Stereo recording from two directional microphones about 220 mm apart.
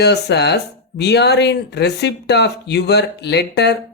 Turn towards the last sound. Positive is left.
turn(degrees=50)  # may be behind; listen again after turning